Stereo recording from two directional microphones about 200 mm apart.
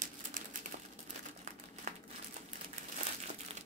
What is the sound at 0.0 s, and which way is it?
Crumpling, 40° right (ahead or behind).